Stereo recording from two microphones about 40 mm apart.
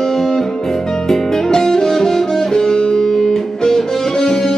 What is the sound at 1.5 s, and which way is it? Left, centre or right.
Music, centre.